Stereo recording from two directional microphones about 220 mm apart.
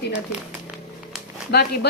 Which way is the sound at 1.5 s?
45° left (ahead or behind).